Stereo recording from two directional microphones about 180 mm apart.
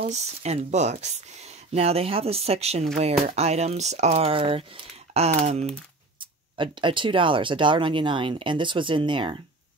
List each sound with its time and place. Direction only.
0.1 s speech: 40° right (ahead or behind)